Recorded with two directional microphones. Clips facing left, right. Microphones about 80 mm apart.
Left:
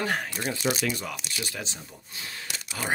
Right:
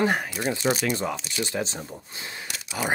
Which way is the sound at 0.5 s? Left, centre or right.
Right.